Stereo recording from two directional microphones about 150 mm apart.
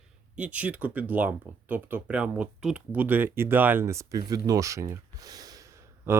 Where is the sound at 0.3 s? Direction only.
10° right (ahead or behind).